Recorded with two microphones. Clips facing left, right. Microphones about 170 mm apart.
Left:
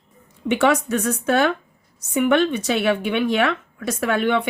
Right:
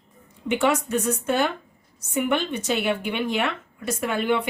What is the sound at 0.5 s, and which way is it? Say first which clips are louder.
A woman's voice: left 3 dB; 85° left.